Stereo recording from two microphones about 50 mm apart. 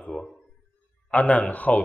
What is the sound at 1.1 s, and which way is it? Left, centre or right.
Speech, left.